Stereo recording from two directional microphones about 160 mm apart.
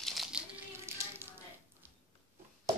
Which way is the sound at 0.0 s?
Centre (ahead or behind).